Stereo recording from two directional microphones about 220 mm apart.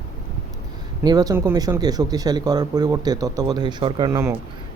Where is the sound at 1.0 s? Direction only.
15° right (ahead or behind).